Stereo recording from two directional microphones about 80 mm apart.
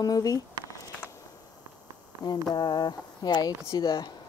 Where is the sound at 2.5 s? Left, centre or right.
Left.